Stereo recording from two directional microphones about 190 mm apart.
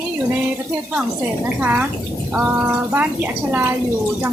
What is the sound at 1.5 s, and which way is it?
A woman's voice, 5° right (ahead or behind).